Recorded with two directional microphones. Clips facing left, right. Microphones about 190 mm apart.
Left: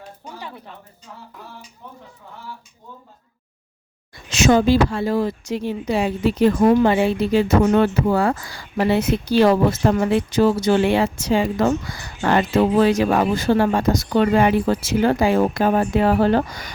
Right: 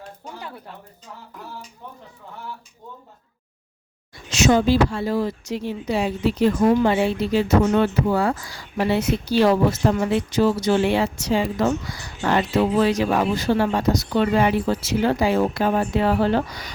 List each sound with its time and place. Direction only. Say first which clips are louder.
4.3 s speech: left 2 dB; 55° left (ahead or behind)